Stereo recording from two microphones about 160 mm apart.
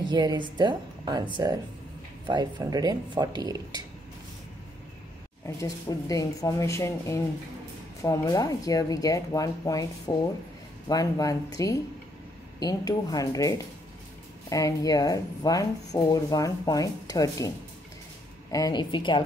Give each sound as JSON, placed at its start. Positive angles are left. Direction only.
{"t": 0.1, "sound": "speech", "side_deg": -25}
{"t": 5.6, "sound": "speech", "side_deg": 20}
{"t": 18.5, "sound": "speech", "side_deg": 25}